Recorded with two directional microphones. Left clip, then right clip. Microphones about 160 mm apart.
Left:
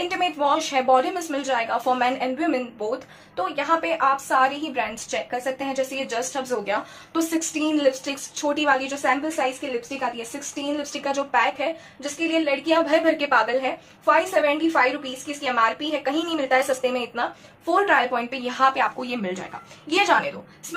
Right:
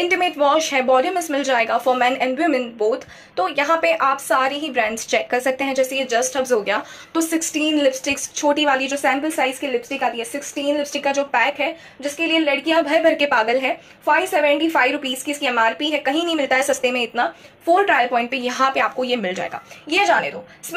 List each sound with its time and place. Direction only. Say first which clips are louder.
0.1 s a woman's voice: right 4 dB; 15° right (ahead or behind)
19.9 s a woman's voice: right 3 dB; 5° right (ahead or behind)